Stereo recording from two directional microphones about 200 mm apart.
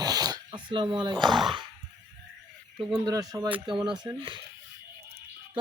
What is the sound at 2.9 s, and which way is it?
Speech, 15° right (ahead or behind).